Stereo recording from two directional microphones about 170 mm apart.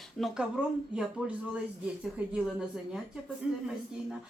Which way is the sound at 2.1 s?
5° right (ahead or behind).